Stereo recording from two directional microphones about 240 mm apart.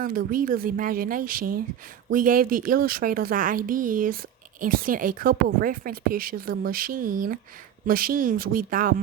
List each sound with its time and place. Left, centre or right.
0.0 s a woman's voice: right